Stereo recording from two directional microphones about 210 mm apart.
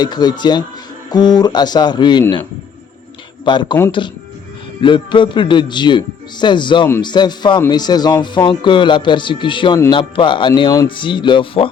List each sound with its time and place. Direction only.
0.0 s speech: 20° left (ahead or behind)
3.4 s speech: 20° left (ahead or behind)
4.8 s speech: 25° left (ahead or behind)